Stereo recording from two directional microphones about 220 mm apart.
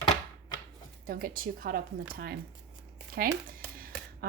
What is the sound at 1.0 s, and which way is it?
Speech, 40° right (ahead or behind).